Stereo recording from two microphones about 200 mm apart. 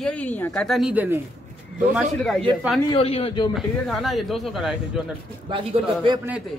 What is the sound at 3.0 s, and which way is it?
Speech, 30° left (ahead or behind).